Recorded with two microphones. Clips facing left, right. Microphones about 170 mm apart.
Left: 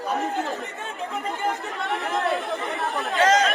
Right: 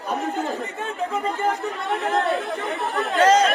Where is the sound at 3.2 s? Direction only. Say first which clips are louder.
Right 3 dB; 35° right (ahead or behind).